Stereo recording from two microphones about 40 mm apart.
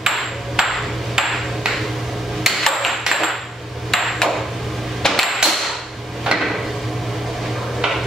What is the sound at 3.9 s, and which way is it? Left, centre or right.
Hammer, centre.